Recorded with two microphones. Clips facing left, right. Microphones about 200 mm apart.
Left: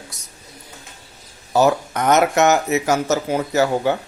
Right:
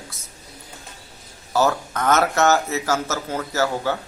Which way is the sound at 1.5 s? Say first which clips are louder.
Left 4 dB; 20° left (ahead or behind).